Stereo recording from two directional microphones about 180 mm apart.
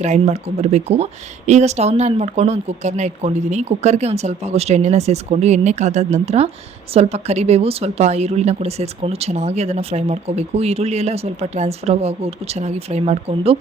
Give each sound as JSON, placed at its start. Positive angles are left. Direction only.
{"t": 0.0, "sound": "a woman's voice", "side_deg": -40}